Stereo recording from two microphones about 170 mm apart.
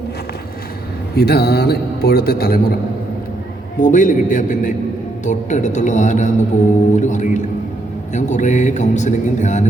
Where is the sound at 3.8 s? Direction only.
50° left (ahead or behind).